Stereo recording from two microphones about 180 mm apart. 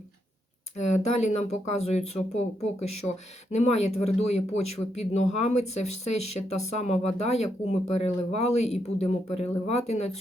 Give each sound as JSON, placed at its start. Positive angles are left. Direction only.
{"t": 0.8, "sound": "speech", "side_deg": 40}